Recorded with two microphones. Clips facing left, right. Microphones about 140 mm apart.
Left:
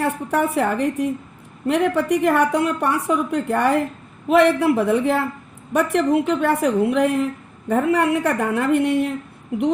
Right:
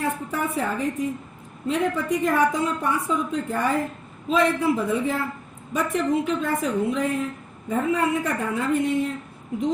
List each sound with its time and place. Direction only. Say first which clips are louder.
0.0 s a woman's voice: left 6 dB; 70° left (ahead or behind)